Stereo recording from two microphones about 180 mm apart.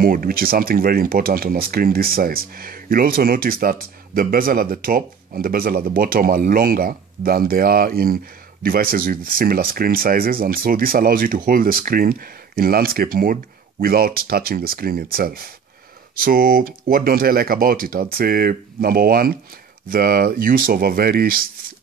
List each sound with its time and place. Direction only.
0.0 s speech: 55° right (ahead or behind)